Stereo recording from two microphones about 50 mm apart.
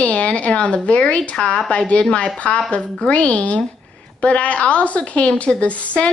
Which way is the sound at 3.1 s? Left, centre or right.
Left.